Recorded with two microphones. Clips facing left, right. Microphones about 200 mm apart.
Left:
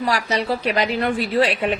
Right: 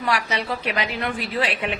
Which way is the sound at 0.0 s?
35° left (ahead or behind).